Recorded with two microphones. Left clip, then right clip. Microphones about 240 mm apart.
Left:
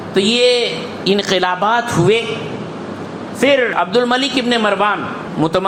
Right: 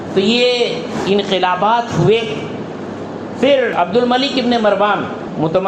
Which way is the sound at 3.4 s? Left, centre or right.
Left.